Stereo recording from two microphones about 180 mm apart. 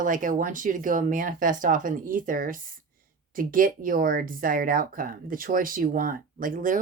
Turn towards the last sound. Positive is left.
turn(degrees=-50)  # may be behind; listen again after turning